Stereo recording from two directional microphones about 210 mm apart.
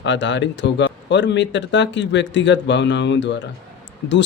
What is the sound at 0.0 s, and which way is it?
Speech, 60° left (ahead or behind).